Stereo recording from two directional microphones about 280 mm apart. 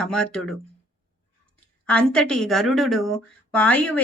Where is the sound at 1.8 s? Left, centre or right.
Centre.